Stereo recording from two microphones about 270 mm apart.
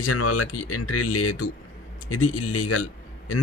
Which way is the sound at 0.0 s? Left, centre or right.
Left.